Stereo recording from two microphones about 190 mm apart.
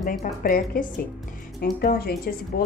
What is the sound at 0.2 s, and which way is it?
Speech, 45° left (ahead or behind).